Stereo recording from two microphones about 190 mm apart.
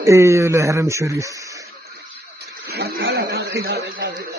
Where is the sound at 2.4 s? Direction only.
55° right (ahead or behind).